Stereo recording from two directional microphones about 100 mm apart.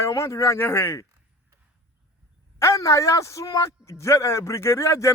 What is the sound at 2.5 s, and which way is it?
A man's voice, 30° left (ahead or behind).